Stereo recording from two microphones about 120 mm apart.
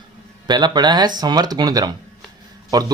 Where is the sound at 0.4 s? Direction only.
35° right (ahead or behind).